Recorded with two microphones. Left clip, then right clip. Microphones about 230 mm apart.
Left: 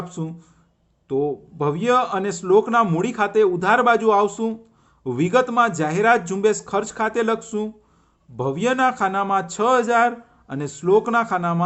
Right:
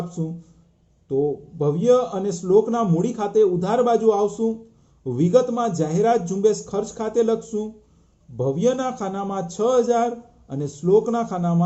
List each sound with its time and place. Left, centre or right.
0.2 s speech: left
1.0 s a man's voice: left